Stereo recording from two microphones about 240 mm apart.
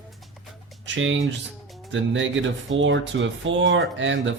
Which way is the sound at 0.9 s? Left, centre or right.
Right.